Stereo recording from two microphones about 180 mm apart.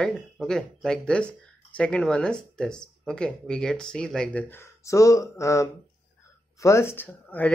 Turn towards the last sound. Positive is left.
turn(degrees=10)  # may be behind; listen again after turning